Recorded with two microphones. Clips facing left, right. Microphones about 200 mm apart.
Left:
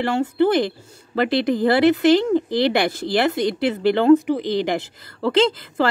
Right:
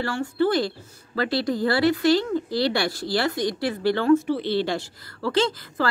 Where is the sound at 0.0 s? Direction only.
20° left (ahead or behind).